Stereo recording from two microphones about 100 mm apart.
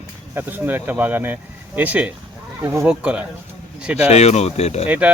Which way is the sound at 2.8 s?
10° right (ahead or behind).